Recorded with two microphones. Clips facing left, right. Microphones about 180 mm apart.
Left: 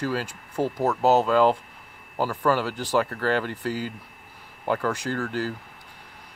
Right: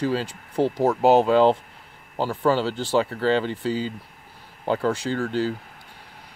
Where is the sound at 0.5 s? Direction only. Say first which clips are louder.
Right 4 dB; 30° right (ahead or behind).